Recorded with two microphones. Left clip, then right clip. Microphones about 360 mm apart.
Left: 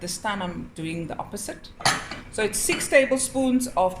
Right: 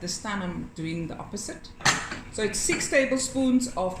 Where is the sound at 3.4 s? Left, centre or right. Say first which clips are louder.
Left 2 dB; left.